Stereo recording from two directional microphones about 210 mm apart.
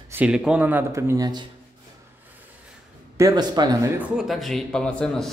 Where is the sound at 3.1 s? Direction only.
15° right (ahead or behind); by 5.2 s 5° left (ahead or behind).